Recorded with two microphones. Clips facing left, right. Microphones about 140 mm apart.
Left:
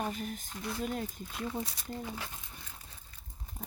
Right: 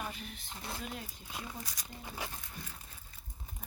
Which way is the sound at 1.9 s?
15° right (ahead or behind).